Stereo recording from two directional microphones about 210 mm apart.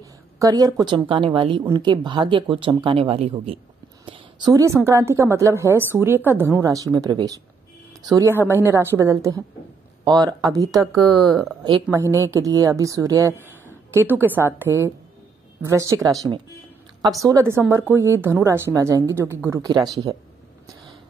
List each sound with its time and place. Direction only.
0.0 s a woman's voice: 15° right (ahead or behind)
4.0 s a sound: 20° right (ahead or behind)
4.8 s a woman's voice: 15° right (ahead or behind)
10.8 s speech: centre (ahead or behind)
11.6 s a woman's voice: 15° right (ahead or behind)